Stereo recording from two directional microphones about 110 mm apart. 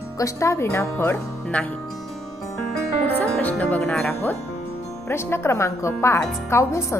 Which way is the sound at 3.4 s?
15° left (ahead or behind).